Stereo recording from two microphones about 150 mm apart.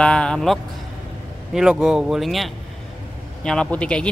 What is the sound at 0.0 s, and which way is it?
Speech, 5° left (ahead or behind).